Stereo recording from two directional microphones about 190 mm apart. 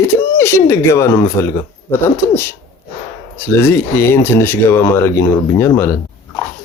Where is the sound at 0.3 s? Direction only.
15° left (ahead or behind).